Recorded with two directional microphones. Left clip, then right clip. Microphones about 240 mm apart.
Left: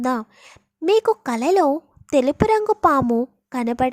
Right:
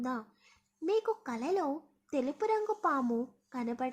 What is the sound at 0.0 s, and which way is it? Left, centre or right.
A woman's voice, left.